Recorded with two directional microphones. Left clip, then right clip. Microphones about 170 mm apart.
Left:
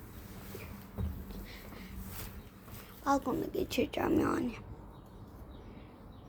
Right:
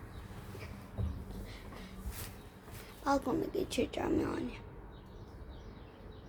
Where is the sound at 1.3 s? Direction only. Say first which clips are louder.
Left 1 dB; 20° left (ahead or behind).